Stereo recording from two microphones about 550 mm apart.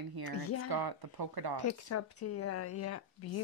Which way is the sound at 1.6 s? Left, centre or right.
Left.